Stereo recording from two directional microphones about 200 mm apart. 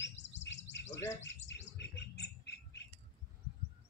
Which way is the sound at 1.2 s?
60° left (ahead or behind).